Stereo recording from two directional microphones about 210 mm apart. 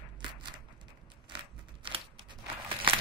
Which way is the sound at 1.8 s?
25° right (ahead or behind).